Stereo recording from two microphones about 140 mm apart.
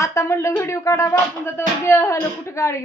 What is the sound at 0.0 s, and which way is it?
Music, 20° left (ahead or behind).